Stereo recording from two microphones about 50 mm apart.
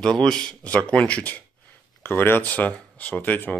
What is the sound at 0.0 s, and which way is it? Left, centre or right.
Speech, centre.